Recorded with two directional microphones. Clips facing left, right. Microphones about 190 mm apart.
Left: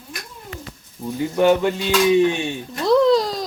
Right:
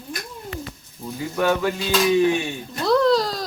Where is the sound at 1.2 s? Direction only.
25° left (ahead or behind).